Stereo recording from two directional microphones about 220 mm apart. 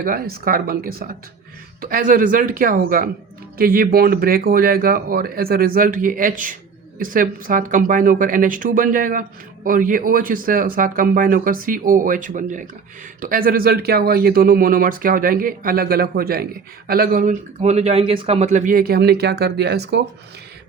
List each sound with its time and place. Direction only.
0.0 s a man's voice: 40° right (ahead or behind)